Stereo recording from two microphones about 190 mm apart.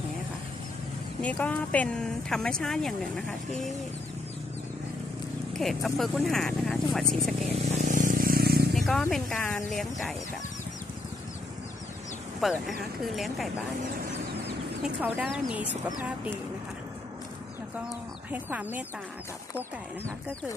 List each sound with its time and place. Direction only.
1.2 s speech: 5° left (ahead or behind)
5.5 s speech: centre (ahead or behind)
7.5 s vehicle: 35° right (ahead or behind); by 8.6 s 55° right (ahead or behind)
8.7 s wild animals: centre (ahead or behind)
9.1 s speech: centre (ahead or behind)
12.4 s speech: centre (ahead or behind)
14.4 s chicken: 10° right (ahead or behind)
15.2 s speech: 5° right (ahead or behind)
18.3 s speech: 10° right (ahead or behind)